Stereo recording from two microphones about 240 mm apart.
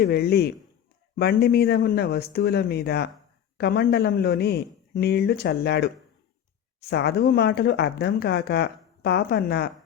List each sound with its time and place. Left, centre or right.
0.0 s speech: left